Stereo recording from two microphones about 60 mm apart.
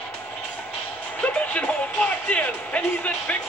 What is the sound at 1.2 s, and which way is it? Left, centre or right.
Speech, left.